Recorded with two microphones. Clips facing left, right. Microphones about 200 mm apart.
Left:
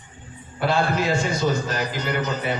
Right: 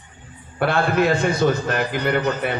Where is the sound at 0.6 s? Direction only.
60° right (ahead or behind).